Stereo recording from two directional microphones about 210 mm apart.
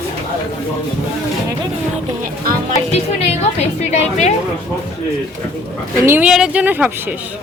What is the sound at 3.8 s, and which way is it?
Speech, 35° left (ahead or behind).